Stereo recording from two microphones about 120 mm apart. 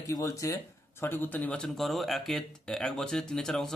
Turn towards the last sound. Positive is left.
turn(degrees=5)  # may be behind; listen again after turning